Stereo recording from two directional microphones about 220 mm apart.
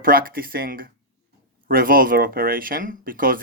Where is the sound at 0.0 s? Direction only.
40° right (ahead or behind).